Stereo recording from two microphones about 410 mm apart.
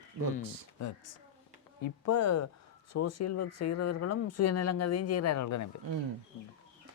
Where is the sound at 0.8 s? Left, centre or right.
Left.